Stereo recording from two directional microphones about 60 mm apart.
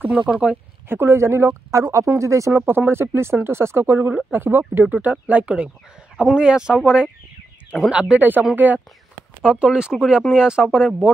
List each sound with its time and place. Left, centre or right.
0.2 s speech: right
0.8 s speech: right
2.5 s speech: right
5.0 s speech: right
8.2 s speech: right
9.4 s speech: centre